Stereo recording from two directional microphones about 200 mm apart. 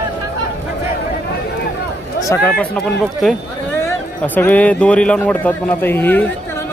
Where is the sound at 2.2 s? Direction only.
15° left (ahead or behind).